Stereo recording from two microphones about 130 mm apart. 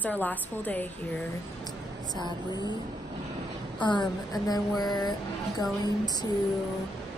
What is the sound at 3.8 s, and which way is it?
Speech, 35° left (ahead or behind).